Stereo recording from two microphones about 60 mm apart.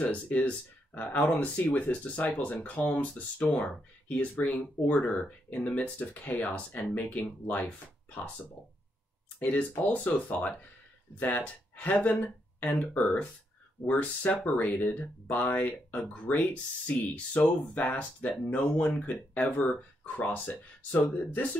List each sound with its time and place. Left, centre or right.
0.0 s speech: left
9.4 s speech: left